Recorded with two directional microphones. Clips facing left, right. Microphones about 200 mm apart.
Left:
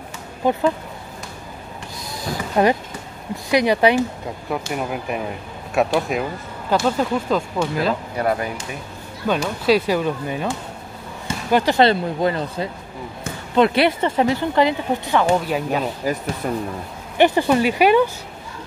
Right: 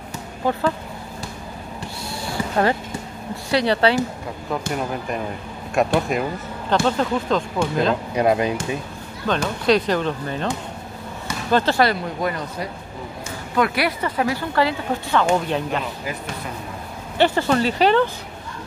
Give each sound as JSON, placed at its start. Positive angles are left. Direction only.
{"t": 0.5, "sound": "speech", "side_deg": 15}
{"t": 2.5, "sound": "speech", "side_deg": 15}
{"t": 8.2, "sound": "speech", "side_deg": -20}
{"t": 9.3, "sound": "speech", "side_deg": 10}
{"t": 11.5, "sound": "speech", "side_deg": 15}
{"t": 11.8, "sound": "speech", "side_deg": 25}
{"t": 15.3, "sound": "speech", "side_deg": 5}
{"t": 15.8, "sound": "speech", "side_deg": 40}
{"t": 17.2, "sound": "speech", "side_deg": 15}